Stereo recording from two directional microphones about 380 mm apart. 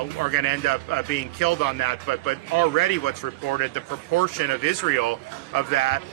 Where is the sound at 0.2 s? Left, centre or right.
Left.